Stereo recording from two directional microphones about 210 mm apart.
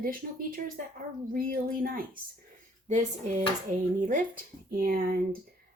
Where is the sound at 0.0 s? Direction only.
40° right (ahead or behind).